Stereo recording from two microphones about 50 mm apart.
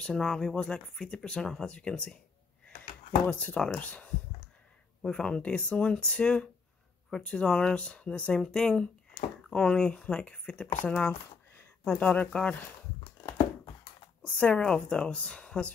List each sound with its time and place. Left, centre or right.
0.0 s speech: centre
3.3 s speech: left
5.0 s speech: centre
8.3 s speech: centre
14.2 s speech: left